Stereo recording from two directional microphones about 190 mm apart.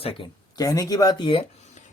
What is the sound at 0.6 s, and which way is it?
Speech, 15° left (ahead or behind).